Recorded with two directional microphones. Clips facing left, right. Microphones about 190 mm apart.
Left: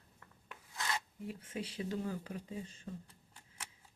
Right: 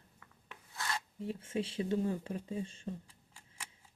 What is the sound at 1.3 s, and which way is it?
Speech, 25° right (ahead or behind).